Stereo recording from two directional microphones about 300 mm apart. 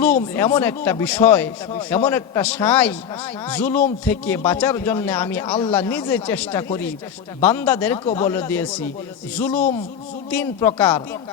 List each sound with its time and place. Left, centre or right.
0.3 s a man's voice: centre
9.5 s speech: left
10.3 s speech: centre